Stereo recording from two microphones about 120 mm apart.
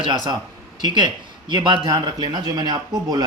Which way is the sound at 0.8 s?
40° right (ahead or behind).